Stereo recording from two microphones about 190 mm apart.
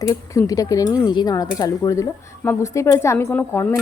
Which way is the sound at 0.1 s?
15° left (ahead or behind).